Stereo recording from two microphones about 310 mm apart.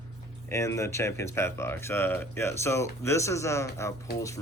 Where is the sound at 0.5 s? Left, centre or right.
Centre.